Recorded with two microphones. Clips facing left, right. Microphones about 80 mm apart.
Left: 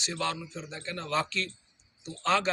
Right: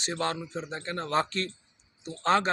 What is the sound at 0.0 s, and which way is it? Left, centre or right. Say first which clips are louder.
Speech: right 2 dB; right.